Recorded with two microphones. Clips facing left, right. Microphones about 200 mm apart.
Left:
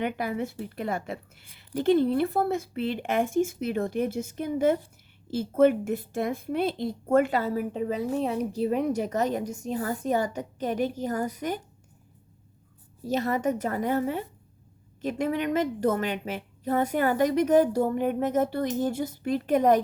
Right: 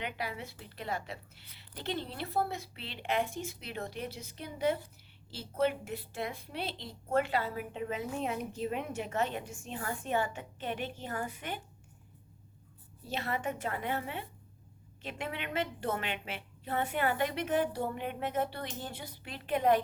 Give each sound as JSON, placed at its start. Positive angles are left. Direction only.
{"t": 0.0, "sound": "a woman's voice", "side_deg": 50}
{"t": 13.0, "sound": "a woman's voice", "side_deg": 40}